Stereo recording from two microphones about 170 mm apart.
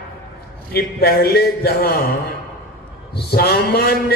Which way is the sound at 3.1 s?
65° left (ahead or behind).